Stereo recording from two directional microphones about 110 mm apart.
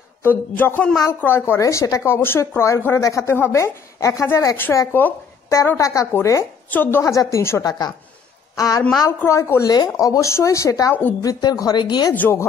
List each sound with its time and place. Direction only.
0.2 s speech: 20° left (ahead or behind); by 12.1 s 40° left (ahead or behind)
12.1 s speech: 20° left (ahead or behind)